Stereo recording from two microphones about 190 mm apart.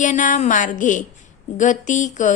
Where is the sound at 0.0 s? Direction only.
40° left (ahead or behind).